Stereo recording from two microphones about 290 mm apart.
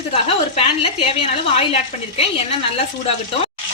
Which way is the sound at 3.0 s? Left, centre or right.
Centre.